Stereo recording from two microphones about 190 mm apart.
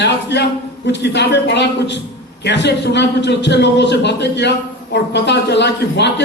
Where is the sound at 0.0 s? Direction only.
65° left (ahead or behind).